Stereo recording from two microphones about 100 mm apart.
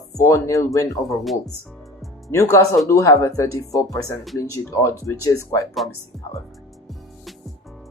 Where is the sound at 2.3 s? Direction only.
30° left (ahead or behind).